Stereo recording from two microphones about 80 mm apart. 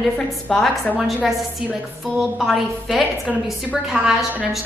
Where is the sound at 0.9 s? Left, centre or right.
Centre.